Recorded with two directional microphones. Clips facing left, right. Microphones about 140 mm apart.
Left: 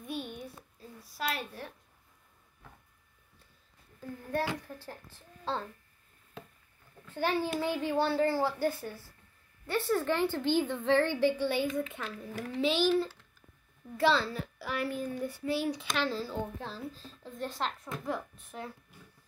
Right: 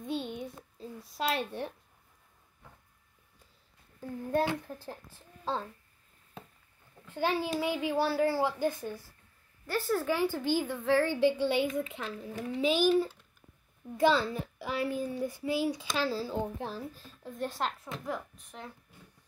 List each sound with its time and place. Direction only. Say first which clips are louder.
0.0 s a sound: right 4 dB; 25° right (ahead or behind)
1.1 s speech: right 4 dB; 25° right (ahead or behind)
4.3 s speech: right 4 dB; 20° right (ahead or behind)
7.1 s a child's voice: even; 15° right (ahead or behind)
9.7 s a child's voice: left 1 dB; centre (ahead or behind); by 12.5 s 20° right (ahead or behind)
12.5 s a child's voice: right 2 dB; 10° right (ahead or behind)
18.5 s speech: left 4 dB; centre (ahead or behind)